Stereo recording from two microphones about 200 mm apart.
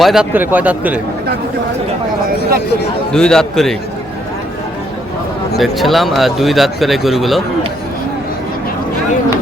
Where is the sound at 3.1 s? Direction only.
5° left (ahead or behind).